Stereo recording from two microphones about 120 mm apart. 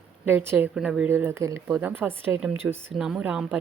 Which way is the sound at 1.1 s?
20° right (ahead or behind).